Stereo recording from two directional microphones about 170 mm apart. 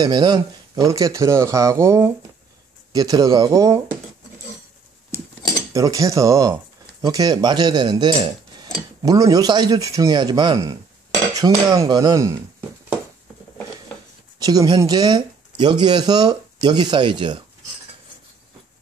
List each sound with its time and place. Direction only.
0.0 s speech: 25° right (ahead or behind)
5.7 s speech: 20° right (ahead or behind)
14.4 s speech: 20° right (ahead or behind)